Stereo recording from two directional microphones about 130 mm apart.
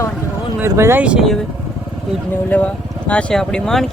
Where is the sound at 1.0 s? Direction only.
10° right (ahead or behind).